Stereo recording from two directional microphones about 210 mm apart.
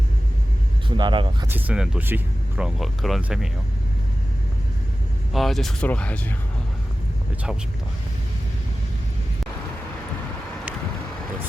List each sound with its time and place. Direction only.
0.9 s speech: 20° right (ahead or behind)
1.5 s speech: 10° right (ahead or behind)
5.3 s speech: centre (ahead or behind)